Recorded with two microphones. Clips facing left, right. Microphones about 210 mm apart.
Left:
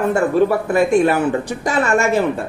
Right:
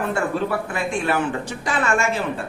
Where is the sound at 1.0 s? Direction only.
40° left (ahead or behind).